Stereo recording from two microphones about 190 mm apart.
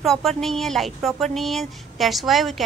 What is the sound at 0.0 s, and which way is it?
Speech, centre (ahead or behind).